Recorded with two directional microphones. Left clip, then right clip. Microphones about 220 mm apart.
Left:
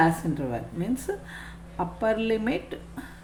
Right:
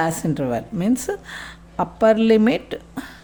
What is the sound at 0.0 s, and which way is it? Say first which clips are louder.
A woman's voice: right 2 dB; 50° right (ahead or behind).